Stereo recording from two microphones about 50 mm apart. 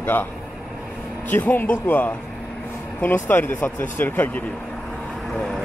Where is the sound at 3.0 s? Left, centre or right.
Left.